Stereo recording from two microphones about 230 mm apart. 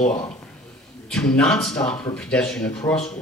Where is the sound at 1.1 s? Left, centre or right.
Centre.